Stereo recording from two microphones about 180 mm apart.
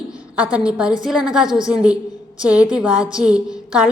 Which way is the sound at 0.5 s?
5° right (ahead or behind).